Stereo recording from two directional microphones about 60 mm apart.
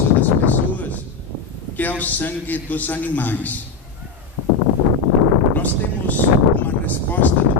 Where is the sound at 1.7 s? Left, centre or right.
Left.